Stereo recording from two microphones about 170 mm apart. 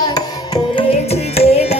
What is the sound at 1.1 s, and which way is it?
Carnatic music, 35° left (ahead or behind).